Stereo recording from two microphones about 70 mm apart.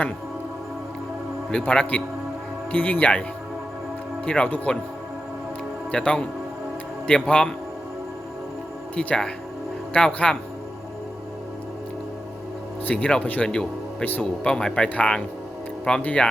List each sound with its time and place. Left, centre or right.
1.5 s speech: centre
4.3 s speech: centre
5.9 s speech: centre
9.0 s speech: centre
12.8 s speech: centre
14.5 s speech: centre